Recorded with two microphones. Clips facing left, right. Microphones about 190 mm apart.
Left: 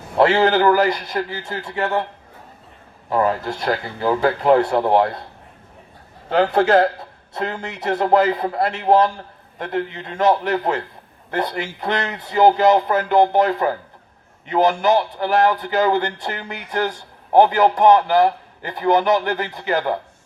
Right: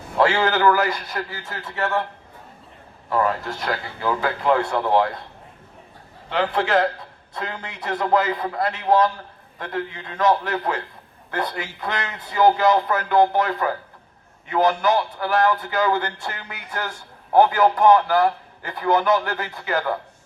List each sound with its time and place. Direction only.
0.2 s a man's voice: 30° left (ahead or behind)
3.1 s a man's voice: 20° left (ahead or behind)
3.7 s speech: 35° left (ahead or behind)
6.2 s a man's voice: 40° left (ahead or behind)
7.9 s a man's voice: 25° left (ahead or behind)